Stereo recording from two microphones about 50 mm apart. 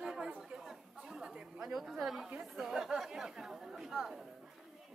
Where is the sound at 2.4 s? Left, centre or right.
Centre.